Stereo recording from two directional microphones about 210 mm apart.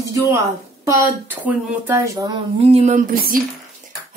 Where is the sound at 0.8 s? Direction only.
10° right (ahead or behind).